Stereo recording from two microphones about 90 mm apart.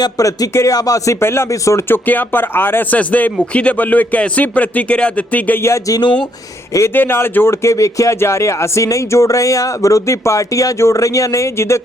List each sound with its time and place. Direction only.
0.0 s speech: 40° left (ahead or behind)
2.0 s speech: 20° left (ahead or behind)
5.6 s speech: 35° left (ahead or behind)